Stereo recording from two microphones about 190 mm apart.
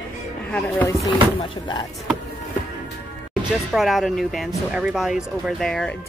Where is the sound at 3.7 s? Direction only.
Centre (ahead or behind).